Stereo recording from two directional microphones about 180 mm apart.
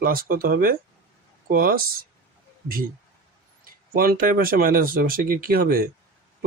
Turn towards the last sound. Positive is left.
turn(degrees=-55)  # may be behind; listen again after turning